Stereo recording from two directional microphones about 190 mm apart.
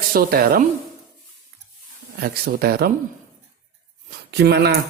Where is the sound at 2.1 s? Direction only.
55° right (ahead or behind).